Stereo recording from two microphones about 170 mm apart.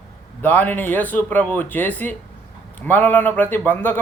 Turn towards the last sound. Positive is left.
turn(degrees=10)  # may be behind; listen again after turning